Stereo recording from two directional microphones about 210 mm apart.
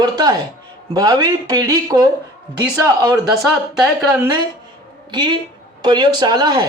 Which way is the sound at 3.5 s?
5° right (ahead or behind).